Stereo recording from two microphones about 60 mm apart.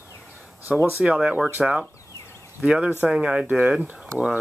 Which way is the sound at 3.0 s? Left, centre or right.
Centre.